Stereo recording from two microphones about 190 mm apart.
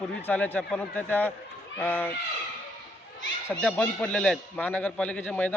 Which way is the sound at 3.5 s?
5° left (ahead or behind).